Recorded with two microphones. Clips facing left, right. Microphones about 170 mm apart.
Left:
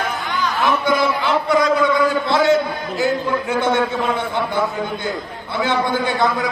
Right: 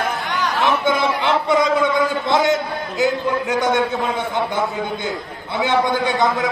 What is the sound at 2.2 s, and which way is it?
A man's voice, 20° right (ahead or behind).